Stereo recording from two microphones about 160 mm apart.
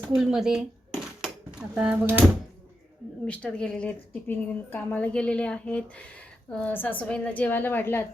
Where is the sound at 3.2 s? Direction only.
10° left (ahead or behind).